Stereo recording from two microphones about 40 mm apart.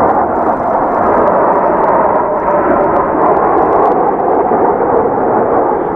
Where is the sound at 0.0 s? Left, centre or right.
Centre.